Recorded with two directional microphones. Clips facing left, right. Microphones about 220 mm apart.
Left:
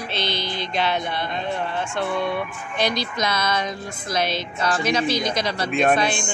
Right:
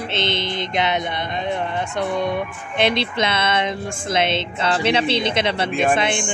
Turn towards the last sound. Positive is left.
turn(degrees=-25)  # may be behind; listen again after turning